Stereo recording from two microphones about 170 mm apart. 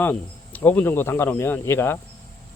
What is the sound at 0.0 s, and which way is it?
Speech, 10° left (ahead or behind).